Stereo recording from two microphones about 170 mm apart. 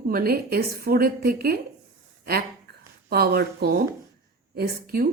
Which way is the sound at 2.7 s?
70° right (ahead or behind).